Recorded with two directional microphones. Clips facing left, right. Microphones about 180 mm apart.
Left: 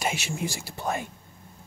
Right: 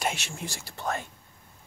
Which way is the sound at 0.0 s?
5° left (ahead or behind).